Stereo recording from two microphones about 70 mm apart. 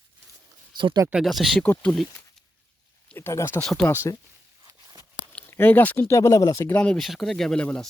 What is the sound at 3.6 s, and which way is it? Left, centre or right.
Speech, centre.